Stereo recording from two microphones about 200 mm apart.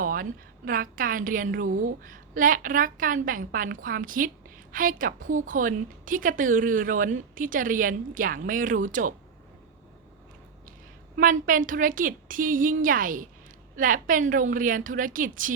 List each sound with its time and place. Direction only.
0.0 s a woman's voice: 45° right (ahead or behind)
11.2 s a woman's voice: 45° right (ahead or behind)